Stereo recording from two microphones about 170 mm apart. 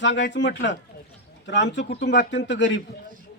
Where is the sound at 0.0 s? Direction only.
90° left.